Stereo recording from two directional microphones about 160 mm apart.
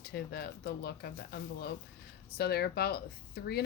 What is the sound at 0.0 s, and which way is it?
A woman's voice, 85° left.